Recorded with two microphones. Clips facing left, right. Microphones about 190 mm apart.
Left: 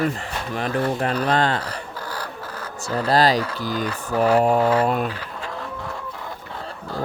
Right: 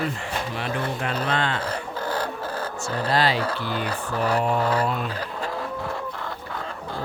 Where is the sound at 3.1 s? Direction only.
40° left (ahead or behind).